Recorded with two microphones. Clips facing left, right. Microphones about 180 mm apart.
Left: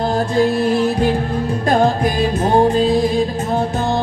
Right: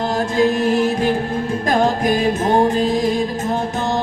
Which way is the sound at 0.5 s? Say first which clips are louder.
Left 1 dB; 35° left (ahead or behind).